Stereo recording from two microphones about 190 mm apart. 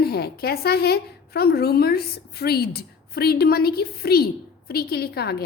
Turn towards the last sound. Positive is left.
turn(degrees=55)  # may be behind; listen again after turning